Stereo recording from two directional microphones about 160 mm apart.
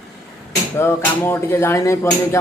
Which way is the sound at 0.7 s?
15° left (ahead or behind).